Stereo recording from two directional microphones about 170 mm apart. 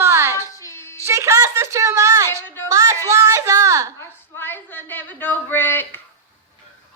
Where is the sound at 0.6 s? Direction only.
15° left (ahead or behind).